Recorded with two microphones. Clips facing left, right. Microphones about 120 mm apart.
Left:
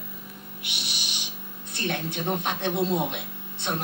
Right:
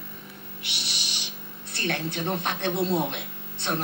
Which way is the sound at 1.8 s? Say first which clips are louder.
Even; 15° left (ahead or behind).